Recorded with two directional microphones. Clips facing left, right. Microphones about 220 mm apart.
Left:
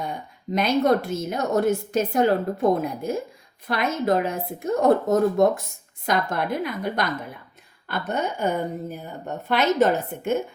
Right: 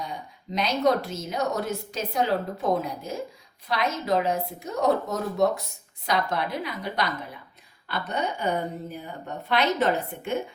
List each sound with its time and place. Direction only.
0.0 s speech: 55° left (ahead or behind)